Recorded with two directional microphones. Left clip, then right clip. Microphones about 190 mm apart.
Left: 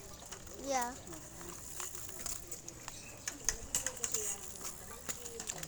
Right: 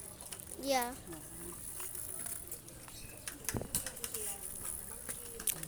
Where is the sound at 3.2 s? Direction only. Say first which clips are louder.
Left 2 dB; 10° left (ahead or behind).